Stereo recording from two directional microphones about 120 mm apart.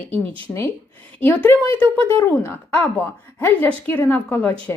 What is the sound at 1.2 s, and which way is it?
A woman's voice, 15° left (ahead or behind).